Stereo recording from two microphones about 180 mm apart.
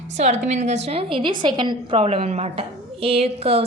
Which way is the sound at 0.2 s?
40° right (ahead or behind).